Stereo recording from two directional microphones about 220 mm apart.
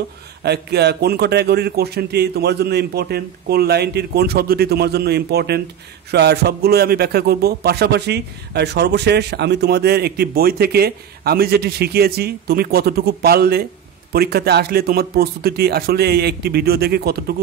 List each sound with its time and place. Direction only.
0.4 s a man's voice: 50° right (ahead or behind)